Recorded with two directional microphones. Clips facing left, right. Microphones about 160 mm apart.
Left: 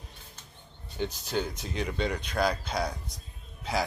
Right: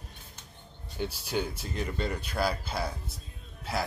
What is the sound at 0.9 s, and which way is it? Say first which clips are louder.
Speech: left 1 dB; 10° right (ahead or behind).